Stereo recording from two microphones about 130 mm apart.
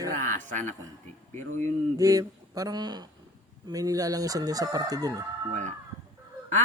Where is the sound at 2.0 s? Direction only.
25° right (ahead or behind).